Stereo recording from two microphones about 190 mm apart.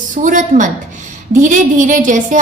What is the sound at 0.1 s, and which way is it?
A woman's voice, 45° right (ahead or behind).